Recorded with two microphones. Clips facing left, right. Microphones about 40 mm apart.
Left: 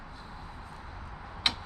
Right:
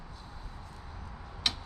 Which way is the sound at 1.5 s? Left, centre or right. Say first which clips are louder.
Left 3 dB; left.